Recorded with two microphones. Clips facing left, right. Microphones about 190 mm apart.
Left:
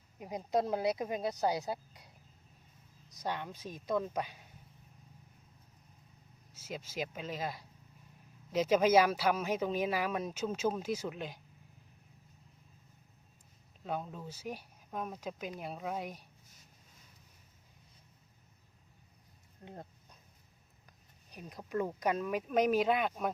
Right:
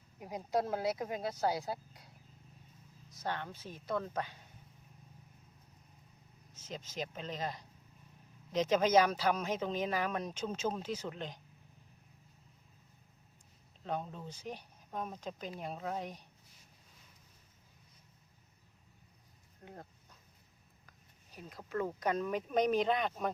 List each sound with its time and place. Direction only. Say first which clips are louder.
0.2 s speech: left 2 dB; 20° left (ahead or behind)
3.1 s speech: left 1 dB; 15° left (ahead or behind)
6.5 s speech: left 3 dB; 10° left (ahead or behind)
13.8 s speech: even; 5° left (ahead or behind)
19.6 s a sound: left 2 dB; 20° left (ahead or behind)
20.8 s speech: left 2 dB; 15° left (ahead or behind)